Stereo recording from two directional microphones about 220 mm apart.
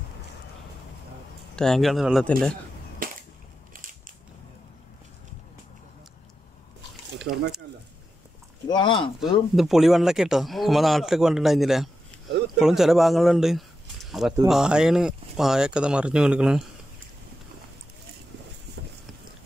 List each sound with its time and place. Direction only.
1.5 s a man's voice: 5° left (ahead or behind)
3.0 s cap gun: 40° right (ahead or behind)
7.2 s speech: 50° right (ahead or behind)
8.6 s speech: 20° left (ahead or behind)
9.6 s a man's voice: centre (ahead or behind)